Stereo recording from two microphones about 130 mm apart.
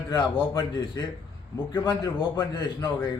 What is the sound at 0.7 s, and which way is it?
Speech, 30° left (ahead or behind).